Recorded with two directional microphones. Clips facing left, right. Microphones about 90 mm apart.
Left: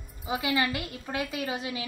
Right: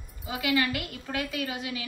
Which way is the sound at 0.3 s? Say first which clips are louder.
Even; 25° left (ahead or behind).